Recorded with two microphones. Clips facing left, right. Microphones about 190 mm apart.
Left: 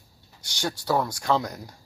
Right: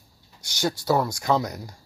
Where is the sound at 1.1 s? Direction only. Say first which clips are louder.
Right 1 dB; 10° right (ahead or behind).